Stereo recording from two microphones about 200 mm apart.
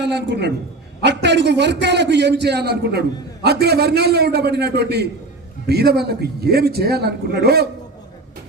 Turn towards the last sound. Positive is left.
turn(degrees=-55)  # may be behind; listen again after turning